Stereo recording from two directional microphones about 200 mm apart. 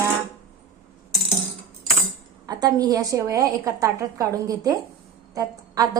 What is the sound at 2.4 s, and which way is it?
Speech, 20° right (ahead or behind).